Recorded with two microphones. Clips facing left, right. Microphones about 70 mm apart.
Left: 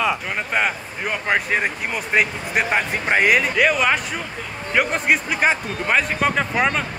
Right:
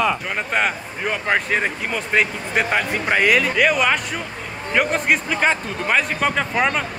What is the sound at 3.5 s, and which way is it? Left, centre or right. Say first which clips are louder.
Speech: even; centre.